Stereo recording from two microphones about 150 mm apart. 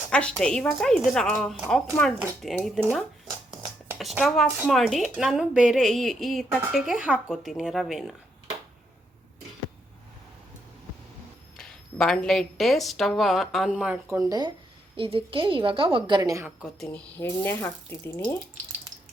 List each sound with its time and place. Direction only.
0.1 s speech: 5° left (ahead or behind)
3.9 s speech: centre (ahead or behind)
11.5 s speech: 5° left (ahead or behind)
14.1 s speech: 25° right (ahead or behind)
14.9 s a woman's voice: 35° right (ahead or behind)
16.6 s speech: 5° right (ahead or behind)
16.9 s speech: 15° left (ahead or behind)